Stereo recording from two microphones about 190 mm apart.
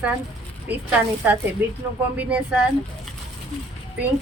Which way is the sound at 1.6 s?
10° right (ahead or behind).